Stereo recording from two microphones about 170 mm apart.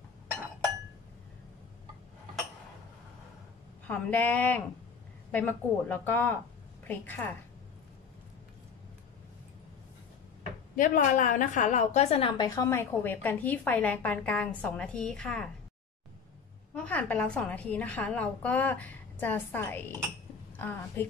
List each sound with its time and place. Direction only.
3.8 s a woman's voice: 10° left (ahead or behind)
10.8 s a woman's voice: 50° left (ahead or behind)
12.4 s a woman's voice: 20° left (ahead or behind)
16.7 s a woman's voice: 10° left (ahead or behind)